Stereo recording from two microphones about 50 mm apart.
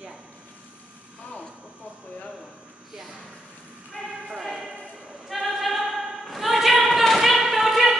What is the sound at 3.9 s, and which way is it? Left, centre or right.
Speech, centre.